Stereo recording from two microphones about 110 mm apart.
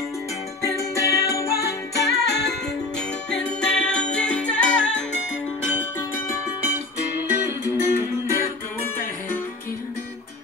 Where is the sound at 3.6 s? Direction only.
10° left (ahead or behind).